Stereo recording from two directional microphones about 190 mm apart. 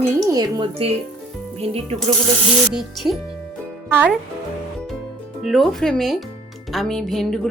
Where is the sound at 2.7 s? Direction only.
Centre (ahead or behind).